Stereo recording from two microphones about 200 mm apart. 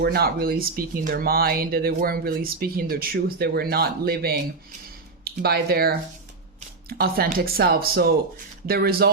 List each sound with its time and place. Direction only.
0.0 s speech: 50° right (ahead or behind)